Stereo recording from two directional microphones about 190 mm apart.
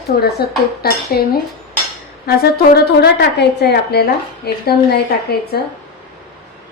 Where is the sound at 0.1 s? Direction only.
55° left (ahead or behind).